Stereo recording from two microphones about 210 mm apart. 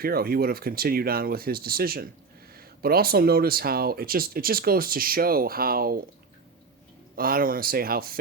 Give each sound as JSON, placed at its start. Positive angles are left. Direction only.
{"t": 0.0, "sound": "speech", "side_deg": -45}
{"t": 7.2, "sound": "speech", "side_deg": -45}